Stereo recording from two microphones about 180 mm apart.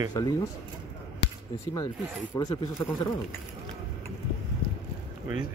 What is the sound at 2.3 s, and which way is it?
Speech, 20° left (ahead or behind).